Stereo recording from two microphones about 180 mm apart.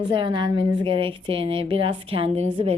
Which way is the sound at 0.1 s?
25° right (ahead or behind).